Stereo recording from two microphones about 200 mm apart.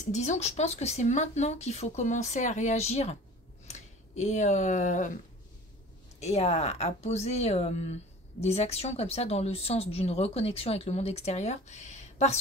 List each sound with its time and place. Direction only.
0.0 s speech: 35° left (ahead or behind)
6.1 s speech: 30° left (ahead or behind)